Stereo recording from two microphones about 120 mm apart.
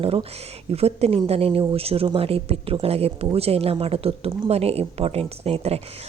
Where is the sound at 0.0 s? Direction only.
50° right (ahead or behind).